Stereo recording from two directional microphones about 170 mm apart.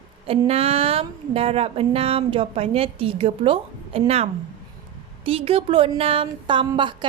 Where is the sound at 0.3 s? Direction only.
35° right (ahead or behind).